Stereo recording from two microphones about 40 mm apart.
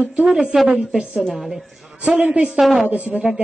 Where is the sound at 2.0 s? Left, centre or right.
Right.